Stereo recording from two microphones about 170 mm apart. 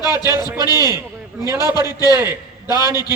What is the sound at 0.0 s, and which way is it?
A man's voice, 25° left (ahead or behind).